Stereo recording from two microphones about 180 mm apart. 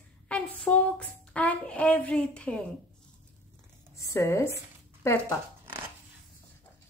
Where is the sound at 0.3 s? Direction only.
5° left (ahead or behind).